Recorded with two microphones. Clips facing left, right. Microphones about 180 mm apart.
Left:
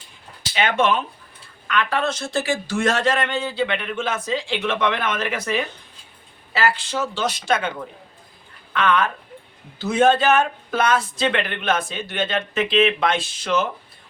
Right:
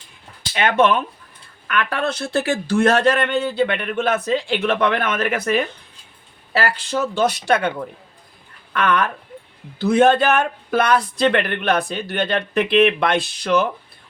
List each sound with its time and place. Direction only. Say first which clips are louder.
0.5 s speech: right 3 dB; 55° right (ahead or behind)
6.9 s speech: right 5 dB; 55° right (ahead or behind)
8.7 s speech: right 1 dB; 55° right (ahead or behind)